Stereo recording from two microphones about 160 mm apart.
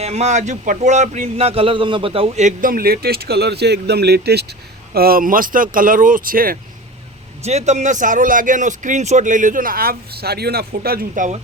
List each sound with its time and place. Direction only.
0.0 s speech: 40° right (ahead or behind); by 4.5 s 90° right
4.9 s speech: 65° right (ahead or behind)
7.4 s speech: 45° right (ahead or behind)